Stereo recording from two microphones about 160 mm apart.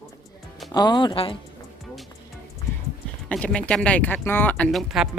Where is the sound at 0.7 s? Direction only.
25° left (ahead or behind).